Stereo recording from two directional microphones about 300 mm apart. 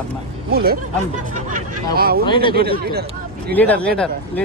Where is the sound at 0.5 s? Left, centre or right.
Right.